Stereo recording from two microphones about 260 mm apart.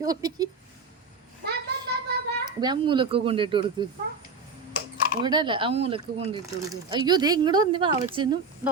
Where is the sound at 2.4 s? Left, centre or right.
Centre.